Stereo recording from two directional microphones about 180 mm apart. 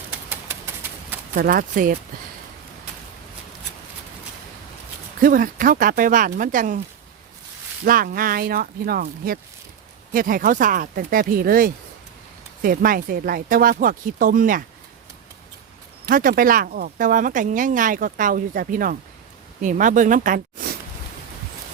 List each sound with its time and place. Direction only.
0.3 s typewriter: 10° right (ahead or behind)
1.4 s speech: 50° right (ahead or behind)
5.2 s speech: 50° right (ahead or behind)
7.9 s speech: 55° right (ahead or behind)
16.0 s speech: 50° right (ahead or behind)